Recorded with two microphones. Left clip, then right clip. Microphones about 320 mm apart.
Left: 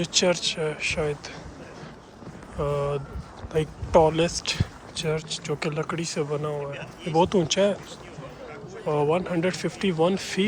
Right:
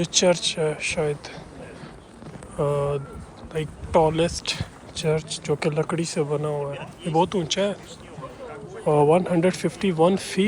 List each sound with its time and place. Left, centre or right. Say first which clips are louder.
0.0 s speech: right 3 dB; centre
2.6 s speech: right 3 dB; centre
6.7 s speech: right 2 dB; right
7.2 s speech: left 1 dB; centre
8.8 s speech: right 5 dB; centre